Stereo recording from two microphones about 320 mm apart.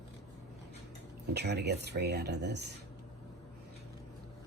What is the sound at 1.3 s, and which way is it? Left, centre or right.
Speech, right.